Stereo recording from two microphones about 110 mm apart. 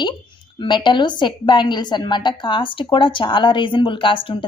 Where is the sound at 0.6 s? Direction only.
45° left (ahead or behind).